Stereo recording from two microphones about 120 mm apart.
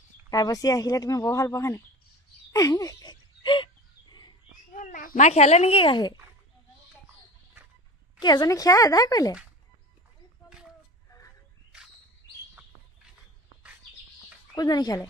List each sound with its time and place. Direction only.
0.3 s speech: 30° left (ahead or behind)
2.5 s a sound: 30° left (ahead or behind)
4.7 s speech: 90° left; by 6.1 s 40° left (ahead or behind)
8.2 s speech: 35° left (ahead or behind)
11.1 s a sound: 25° left (ahead or behind)
14.5 s speech: 35° left (ahead or behind)